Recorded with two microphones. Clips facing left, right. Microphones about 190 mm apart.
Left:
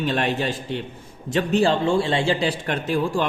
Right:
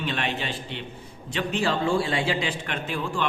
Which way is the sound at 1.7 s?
25° left (ahead or behind).